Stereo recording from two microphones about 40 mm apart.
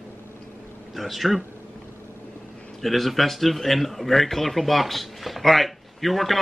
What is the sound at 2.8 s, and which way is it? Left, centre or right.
A man's voice, centre.